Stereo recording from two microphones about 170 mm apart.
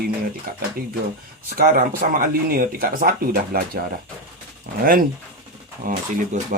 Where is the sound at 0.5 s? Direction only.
60° right (ahead or behind).